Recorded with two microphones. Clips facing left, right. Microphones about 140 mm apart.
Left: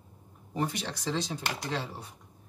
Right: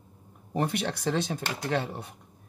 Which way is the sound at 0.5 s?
60° right (ahead or behind).